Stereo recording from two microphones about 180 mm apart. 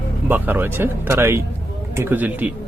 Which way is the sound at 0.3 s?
10° right (ahead or behind).